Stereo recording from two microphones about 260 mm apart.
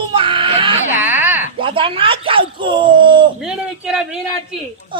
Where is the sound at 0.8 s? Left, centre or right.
Centre.